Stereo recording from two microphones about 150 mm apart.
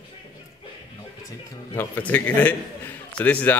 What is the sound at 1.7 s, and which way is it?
Speech, 10° left (ahead or behind).